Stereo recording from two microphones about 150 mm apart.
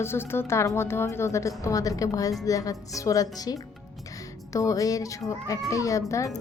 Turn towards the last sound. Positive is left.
turn(degrees=20)  # may be behind; listen again after turning